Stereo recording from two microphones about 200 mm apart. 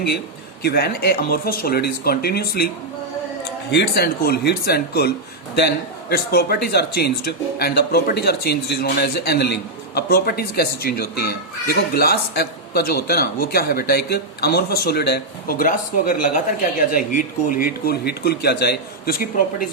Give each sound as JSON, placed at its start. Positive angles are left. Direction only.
{"t": 0.6, "sound": "speech", "side_deg": 55}
{"t": 3.7, "sound": "speech", "side_deg": 55}